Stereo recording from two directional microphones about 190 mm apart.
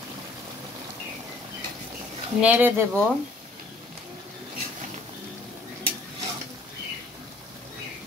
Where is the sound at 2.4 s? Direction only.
10° right (ahead or behind).